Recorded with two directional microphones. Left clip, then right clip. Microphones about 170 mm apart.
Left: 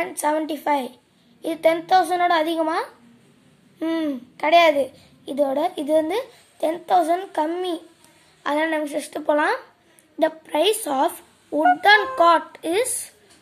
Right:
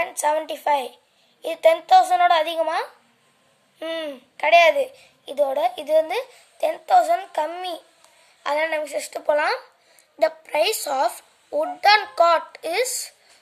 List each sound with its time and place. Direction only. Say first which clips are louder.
0.0 s a child's voice: right 1 dB; 20° right (ahead or behind)